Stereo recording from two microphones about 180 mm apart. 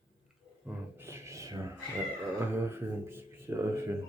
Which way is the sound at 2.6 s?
15° right (ahead or behind).